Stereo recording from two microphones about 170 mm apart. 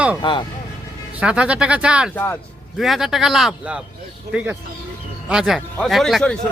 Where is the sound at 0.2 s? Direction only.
25° left (ahead or behind).